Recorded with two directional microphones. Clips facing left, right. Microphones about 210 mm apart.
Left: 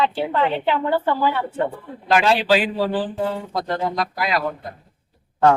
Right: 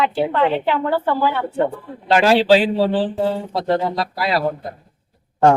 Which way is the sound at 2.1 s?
25° right (ahead or behind).